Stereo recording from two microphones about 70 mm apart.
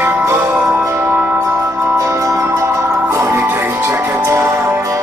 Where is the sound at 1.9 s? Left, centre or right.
Right.